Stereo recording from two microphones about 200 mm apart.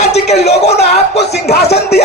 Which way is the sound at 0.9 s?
55° left (ahead or behind).